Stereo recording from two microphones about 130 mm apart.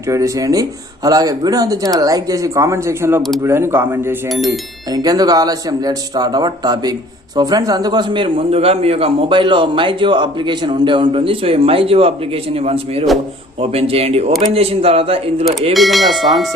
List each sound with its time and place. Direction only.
0.1 s speech: 25° right (ahead or behind)
4.3 s speech: centre (ahead or behind)
4.9 s a man's voice: 30° right (ahead or behind); by 15.4 s 50° right (ahead or behind)
15.7 s speech: centre (ahead or behind)